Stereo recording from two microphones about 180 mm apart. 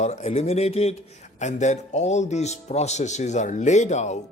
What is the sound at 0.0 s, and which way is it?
Speech, 35° left (ahead or behind).